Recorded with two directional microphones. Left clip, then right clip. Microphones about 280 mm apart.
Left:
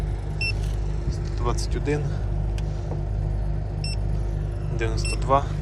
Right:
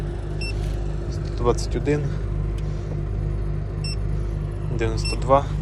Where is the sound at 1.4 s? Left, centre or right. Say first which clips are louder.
Right 6 dB; centre.